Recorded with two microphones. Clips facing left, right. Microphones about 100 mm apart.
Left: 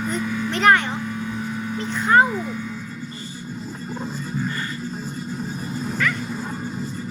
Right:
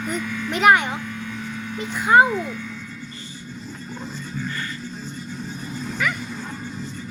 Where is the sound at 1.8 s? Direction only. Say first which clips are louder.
Right 1 dB; 10° right (ahead or behind).